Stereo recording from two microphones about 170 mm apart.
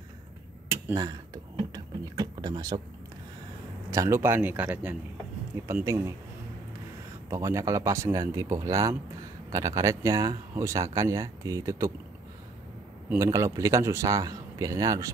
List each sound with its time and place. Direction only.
0.9 s speech: 20° right (ahead or behind)
1.7 s a sound: 25° right (ahead or behind)
3.9 s speech: 15° right (ahead or behind)
7.2 s speech: 20° right (ahead or behind)
13.2 s speech: 15° right (ahead or behind)